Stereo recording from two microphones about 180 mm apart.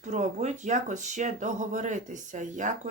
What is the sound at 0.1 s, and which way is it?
Speech, 40° right (ahead or behind).